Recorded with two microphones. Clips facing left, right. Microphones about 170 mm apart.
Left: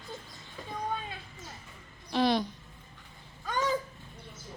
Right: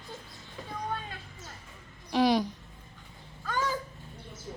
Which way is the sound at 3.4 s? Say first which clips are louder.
Left 2 dB; 20° left (ahead or behind).